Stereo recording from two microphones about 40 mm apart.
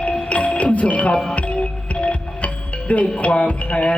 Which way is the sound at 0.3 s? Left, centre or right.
Left.